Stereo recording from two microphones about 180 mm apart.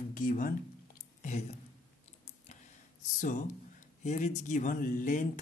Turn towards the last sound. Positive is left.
turn(degrees=45)  # may be behind; listen again after turning